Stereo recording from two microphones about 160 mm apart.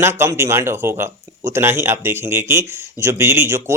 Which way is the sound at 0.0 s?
15° right (ahead or behind).